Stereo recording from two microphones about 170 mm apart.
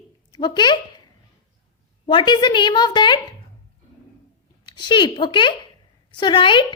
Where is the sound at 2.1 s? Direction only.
25° left (ahead or behind).